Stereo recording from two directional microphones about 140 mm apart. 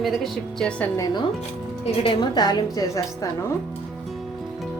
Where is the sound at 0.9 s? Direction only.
30° left (ahead or behind).